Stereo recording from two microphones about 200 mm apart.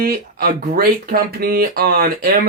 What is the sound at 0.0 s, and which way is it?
Speech, 45° right (ahead or behind).